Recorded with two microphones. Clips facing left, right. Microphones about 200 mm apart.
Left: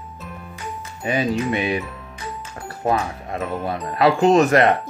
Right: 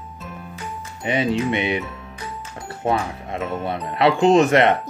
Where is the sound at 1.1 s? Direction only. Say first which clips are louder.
Even; 25° right (ahead or behind).